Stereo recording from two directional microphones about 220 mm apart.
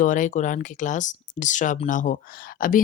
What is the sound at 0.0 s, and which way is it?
Speech, 35° left (ahead or behind).